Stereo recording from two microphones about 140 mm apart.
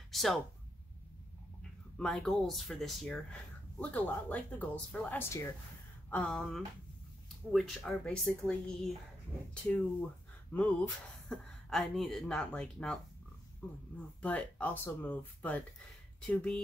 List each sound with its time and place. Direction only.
0.1 s speech: centre (ahead or behind)
1.6 s speech: 5° left (ahead or behind)